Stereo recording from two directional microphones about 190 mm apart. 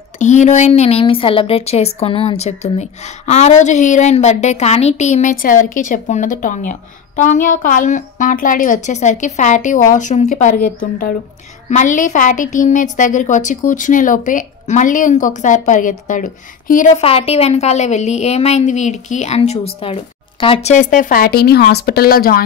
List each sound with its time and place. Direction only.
0.2 s a woman's voice: 40° left (ahead or behind)
17.0 s speech: 30° left (ahead or behind); by 22.4 s 50° left (ahead or behind)